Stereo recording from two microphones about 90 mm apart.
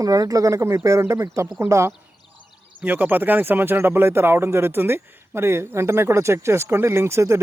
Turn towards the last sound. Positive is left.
turn(degrees=-30)  # may be behind; listen again after turning